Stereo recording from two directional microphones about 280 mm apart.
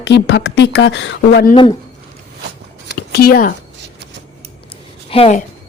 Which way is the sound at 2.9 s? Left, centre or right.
Left.